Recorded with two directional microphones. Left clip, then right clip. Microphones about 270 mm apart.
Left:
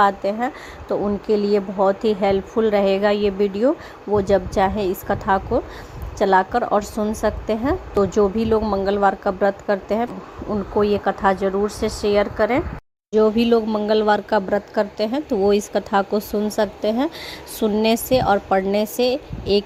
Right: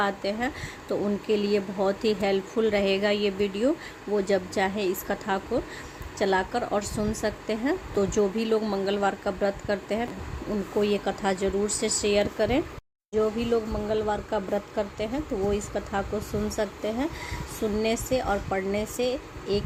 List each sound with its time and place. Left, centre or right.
0.0 s a woman's voice: centre
13.1 s speech: left